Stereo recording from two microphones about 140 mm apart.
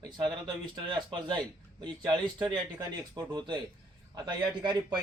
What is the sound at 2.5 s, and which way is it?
A man's voice, 30° right (ahead or behind).